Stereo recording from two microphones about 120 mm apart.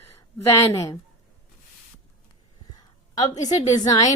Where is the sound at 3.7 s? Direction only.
30° left (ahead or behind).